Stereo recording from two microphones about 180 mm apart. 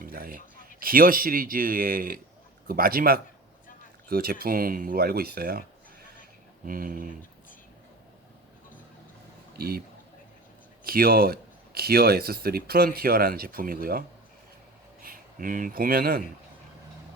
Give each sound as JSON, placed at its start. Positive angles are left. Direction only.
{"t": 0.0, "sound": "a sound", "side_deg": -55}
{"t": 0.8, "sound": "speech", "side_deg": -55}
{"t": 6.7, "sound": "speech", "side_deg": -50}
{"t": 9.6, "sound": "speech", "side_deg": -60}
{"t": 10.8, "sound": "speech", "side_deg": -55}
{"t": 15.0, "sound": "speech", "side_deg": -50}